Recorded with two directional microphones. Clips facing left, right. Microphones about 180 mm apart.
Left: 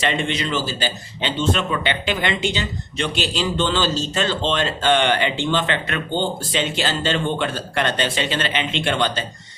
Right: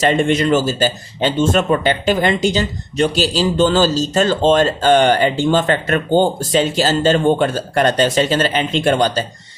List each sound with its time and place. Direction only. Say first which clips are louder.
0.0 s speech: right 8 dB; 45° right (ahead or behind)